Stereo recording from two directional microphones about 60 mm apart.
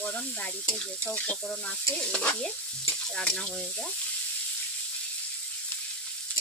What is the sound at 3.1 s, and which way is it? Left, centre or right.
Speech, centre.